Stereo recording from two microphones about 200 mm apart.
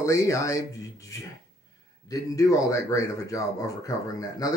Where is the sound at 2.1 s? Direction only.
15° left (ahead or behind).